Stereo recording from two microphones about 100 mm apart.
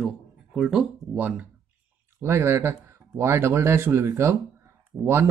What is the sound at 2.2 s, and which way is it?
Speech, 25° right (ahead or behind).